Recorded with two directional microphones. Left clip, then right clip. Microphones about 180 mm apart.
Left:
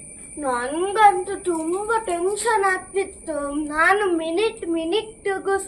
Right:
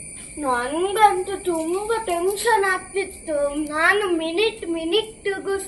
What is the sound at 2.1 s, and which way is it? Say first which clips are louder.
A child's voice: right 2 dB; 15° left (ahead or behind).